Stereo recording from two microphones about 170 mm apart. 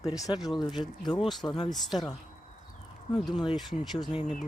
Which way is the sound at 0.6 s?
Centre (ahead or behind).